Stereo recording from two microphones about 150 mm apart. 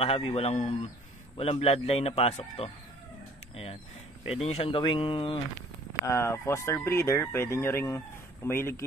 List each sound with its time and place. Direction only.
0.0 s a man's voice: 40° left (ahead or behind)
4.3 s a man's voice: 40° left (ahead or behind)
6.0 s speech: 20° left (ahead or behind)